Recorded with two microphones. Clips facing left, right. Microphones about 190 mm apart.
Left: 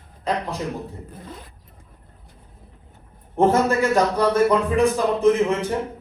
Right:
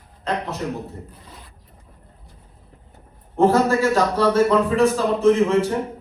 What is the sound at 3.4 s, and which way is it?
A man's voice, 20° left (ahead or behind).